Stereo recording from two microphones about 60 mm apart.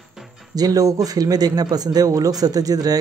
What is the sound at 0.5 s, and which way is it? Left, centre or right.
Speech, right.